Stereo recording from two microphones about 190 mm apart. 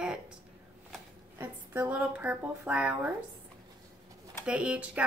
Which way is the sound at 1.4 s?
10° right (ahead or behind).